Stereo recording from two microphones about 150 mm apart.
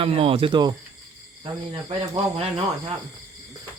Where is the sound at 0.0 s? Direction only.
40° right (ahead or behind).